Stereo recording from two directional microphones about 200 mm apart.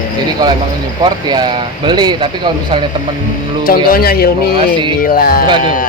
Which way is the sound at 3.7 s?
50° left (ahead or behind).